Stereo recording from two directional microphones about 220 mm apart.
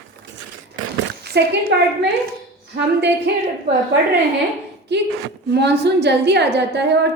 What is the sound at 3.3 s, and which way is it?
Speech, 50° right (ahead or behind).